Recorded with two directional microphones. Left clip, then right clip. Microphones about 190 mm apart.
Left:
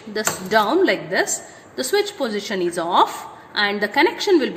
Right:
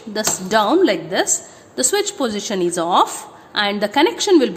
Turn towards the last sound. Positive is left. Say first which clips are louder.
# right 2 dB
turn(degrees=-45)  # may be behind; listen again after turning